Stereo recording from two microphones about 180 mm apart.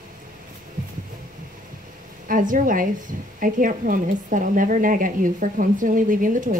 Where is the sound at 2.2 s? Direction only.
50° right (ahead or behind).